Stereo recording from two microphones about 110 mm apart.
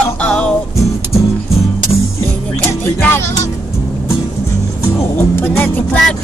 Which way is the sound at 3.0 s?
20° left (ahead or behind).